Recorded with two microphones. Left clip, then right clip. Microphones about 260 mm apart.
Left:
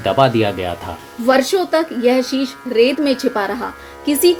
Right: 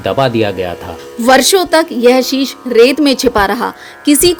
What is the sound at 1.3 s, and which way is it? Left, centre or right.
A woman's voice, right.